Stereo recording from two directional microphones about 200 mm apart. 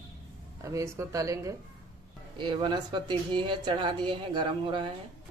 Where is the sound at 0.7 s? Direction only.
15° right (ahead or behind).